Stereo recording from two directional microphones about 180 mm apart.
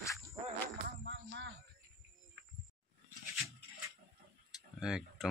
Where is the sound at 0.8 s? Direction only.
75° right (ahead or behind).